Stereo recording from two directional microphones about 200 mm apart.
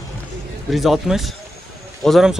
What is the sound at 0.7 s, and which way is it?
A man's voice, centre (ahead or behind).